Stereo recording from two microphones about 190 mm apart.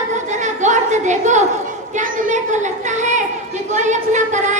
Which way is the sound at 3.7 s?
40° right (ahead or behind).